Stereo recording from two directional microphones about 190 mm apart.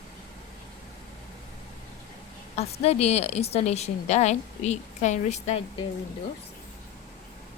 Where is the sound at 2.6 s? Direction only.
35° left (ahead or behind).